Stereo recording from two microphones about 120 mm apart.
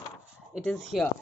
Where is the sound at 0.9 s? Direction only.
5° right (ahead or behind).